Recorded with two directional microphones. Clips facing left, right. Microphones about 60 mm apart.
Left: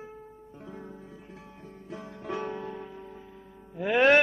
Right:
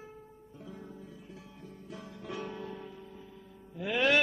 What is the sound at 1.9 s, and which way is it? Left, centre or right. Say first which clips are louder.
Music: left 6 dB; left.